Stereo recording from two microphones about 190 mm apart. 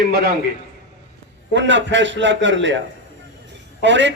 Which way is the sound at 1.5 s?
70° right (ahead or behind).